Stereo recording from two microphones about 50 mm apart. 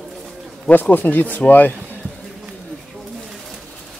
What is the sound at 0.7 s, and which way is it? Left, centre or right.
Speech, left.